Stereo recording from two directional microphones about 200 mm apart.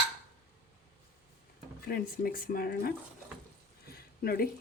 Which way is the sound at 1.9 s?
45° left (ahead or behind).